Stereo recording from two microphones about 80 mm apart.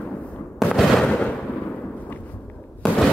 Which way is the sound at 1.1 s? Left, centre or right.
Centre.